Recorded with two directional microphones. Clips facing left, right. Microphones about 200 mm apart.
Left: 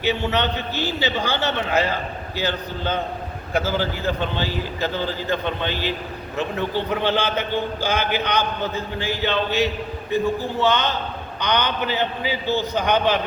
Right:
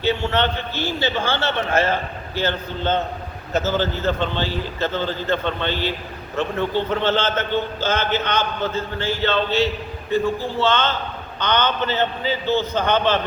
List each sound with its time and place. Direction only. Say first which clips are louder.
0.0 s a man's voice: right 1 dB; 15° left (ahead or behind)